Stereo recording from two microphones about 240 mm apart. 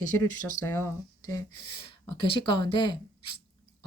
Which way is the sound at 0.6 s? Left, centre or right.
Centre.